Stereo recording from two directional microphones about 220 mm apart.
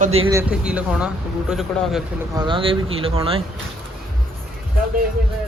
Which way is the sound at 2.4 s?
20° right (ahead or behind).